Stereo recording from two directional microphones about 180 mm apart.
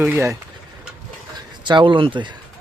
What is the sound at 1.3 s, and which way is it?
Speech, 25° right (ahead or behind).